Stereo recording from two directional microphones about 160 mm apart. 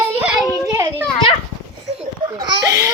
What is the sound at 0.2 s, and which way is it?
Children playing, 10° right (ahead or behind).